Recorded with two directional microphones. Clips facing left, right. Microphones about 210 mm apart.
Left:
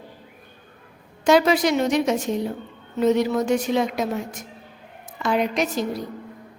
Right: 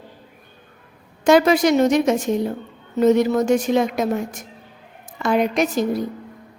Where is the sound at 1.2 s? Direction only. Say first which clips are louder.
Right 3 dB; 50° right (ahead or behind).